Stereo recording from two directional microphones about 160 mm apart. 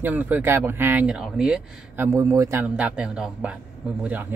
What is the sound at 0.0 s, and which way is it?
Speech, 10° right (ahead or behind).